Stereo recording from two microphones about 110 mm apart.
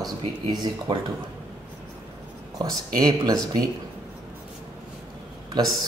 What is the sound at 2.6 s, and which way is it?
Speech, 35° right (ahead or behind).